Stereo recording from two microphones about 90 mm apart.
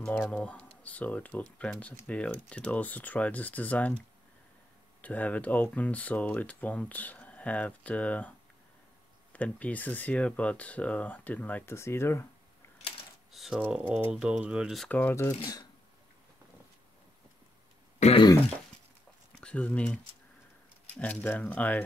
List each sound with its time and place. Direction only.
0.1 s speech: 15° left (ahead or behind)
5.0 s speech: 15° left (ahead or behind)
9.3 s speech: 15° left (ahead or behind)
11.7 s speech: 30° left (ahead or behind)
13.3 s a sound: centre (ahead or behind)
13.7 s speech: 15° right (ahead or behind)
14.9 s speech: 20° left (ahead or behind)
19.4 s speech: 15° left (ahead or behind)